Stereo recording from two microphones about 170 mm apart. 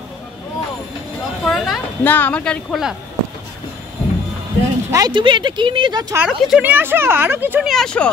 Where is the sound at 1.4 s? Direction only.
5° left (ahead or behind).